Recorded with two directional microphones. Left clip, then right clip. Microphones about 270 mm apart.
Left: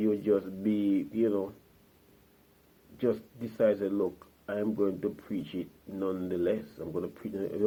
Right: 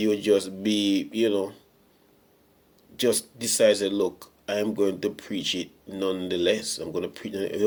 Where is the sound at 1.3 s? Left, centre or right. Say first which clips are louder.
Right 5 dB; right.